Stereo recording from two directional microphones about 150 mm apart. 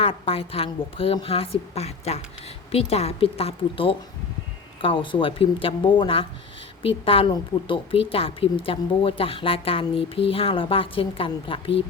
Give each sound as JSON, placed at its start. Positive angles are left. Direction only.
{"t": 0.0, "sound": "speech", "side_deg": 40}